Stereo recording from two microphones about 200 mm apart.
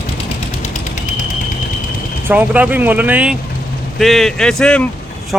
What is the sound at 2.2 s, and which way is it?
Speech, 10° right (ahead or behind).